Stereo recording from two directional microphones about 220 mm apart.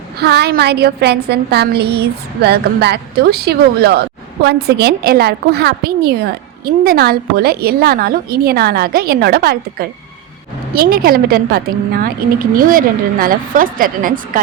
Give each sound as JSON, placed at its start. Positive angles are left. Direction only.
{"t": 0.2, "sound": "a woman's voice", "side_deg": -50}